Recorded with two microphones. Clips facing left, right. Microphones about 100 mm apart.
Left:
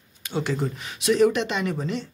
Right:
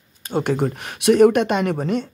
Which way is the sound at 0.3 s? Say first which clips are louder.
Right 6 dB; 50° right (ahead or behind).